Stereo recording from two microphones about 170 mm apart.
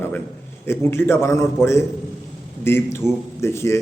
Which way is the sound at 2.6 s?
15° left (ahead or behind).